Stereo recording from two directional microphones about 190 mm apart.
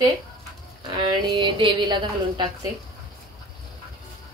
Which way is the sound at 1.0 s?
25° right (ahead or behind).